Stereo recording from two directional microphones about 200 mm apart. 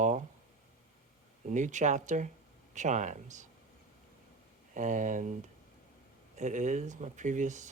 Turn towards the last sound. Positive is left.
turn(degrees=-40)  # may be behind; listen again after turning